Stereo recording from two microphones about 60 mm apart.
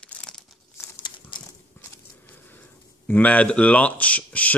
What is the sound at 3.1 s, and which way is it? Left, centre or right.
Speech, left.